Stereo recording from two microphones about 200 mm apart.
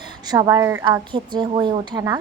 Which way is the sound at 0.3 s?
15° right (ahead or behind).